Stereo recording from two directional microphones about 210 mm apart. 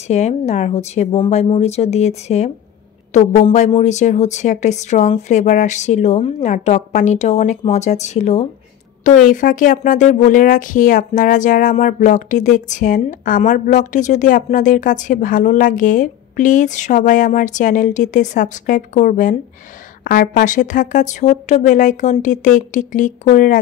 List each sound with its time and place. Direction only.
0.1 s speech: 35° left (ahead or behind)